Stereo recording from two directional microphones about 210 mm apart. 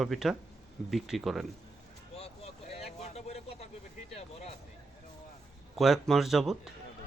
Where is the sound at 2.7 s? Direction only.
30° left (ahead or behind).